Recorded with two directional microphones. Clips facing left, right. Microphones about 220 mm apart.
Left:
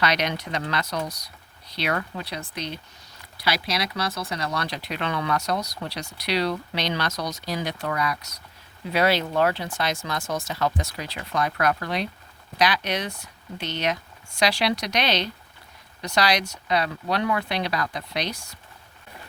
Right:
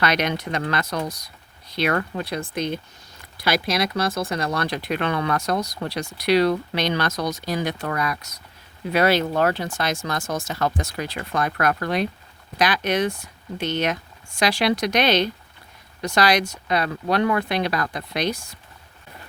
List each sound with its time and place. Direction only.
0.0 s speech: 50° right (ahead or behind)